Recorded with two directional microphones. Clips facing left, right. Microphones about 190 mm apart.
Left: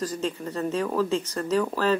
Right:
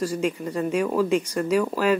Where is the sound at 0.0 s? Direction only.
10° right (ahead or behind).